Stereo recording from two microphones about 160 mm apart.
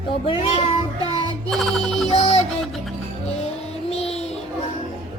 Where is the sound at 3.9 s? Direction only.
40° left (ahead or behind).